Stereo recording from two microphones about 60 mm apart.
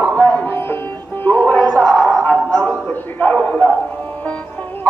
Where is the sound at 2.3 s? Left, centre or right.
Left.